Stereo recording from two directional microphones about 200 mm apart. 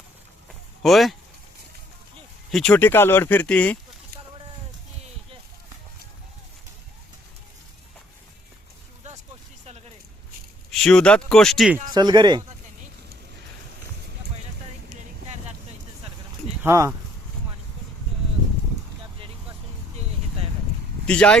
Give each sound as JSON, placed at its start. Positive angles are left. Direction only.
{"t": 0.8, "sound": "speech", "side_deg": 0}
{"t": 2.5, "sound": "speech", "side_deg": 5}
{"t": 9.0, "sound": "vehicle", "side_deg": -35}
{"t": 9.6, "sound": "a sound", "side_deg": -30}
{"t": 10.7, "sound": "speech", "side_deg": 5}
{"t": 11.9, "sound": "speech", "side_deg": -20}
{"t": 16.6, "sound": "speech", "side_deg": -15}
{"t": 21.1, "sound": "speech", "side_deg": 5}